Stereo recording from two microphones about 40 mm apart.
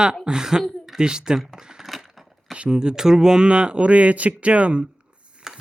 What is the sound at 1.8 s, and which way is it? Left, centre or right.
Crushing, centre.